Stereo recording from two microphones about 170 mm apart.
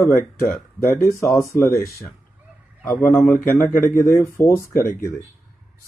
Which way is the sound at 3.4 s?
55° left (ahead or behind).